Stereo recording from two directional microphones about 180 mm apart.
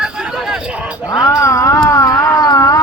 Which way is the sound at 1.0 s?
20° left (ahead or behind).